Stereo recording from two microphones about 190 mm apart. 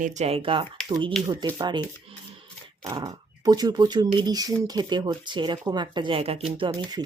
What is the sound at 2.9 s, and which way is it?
Speech, 20° right (ahead or behind).